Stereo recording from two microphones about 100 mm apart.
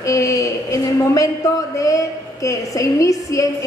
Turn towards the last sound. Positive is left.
turn(degrees=30)  # may be behind; listen again after turning